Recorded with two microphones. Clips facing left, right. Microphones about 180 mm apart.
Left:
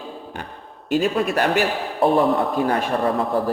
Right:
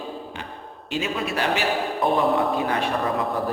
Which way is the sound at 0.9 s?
45° left (ahead or behind).